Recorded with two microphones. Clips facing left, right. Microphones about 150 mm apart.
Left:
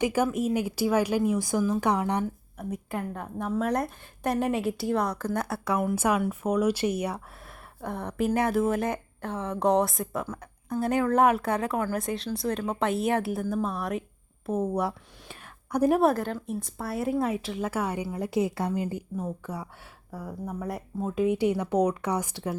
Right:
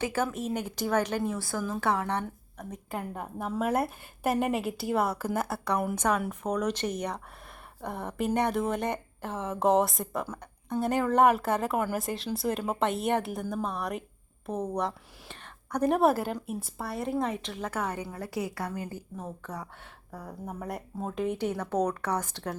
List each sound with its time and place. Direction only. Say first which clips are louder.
0.0 s a woman's voice: left 5 dB; 15° left (ahead or behind)
2.9 s a woman's voice: right 1 dB; 5° right (ahead or behind); by 22.5 s 10° left (ahead or behind)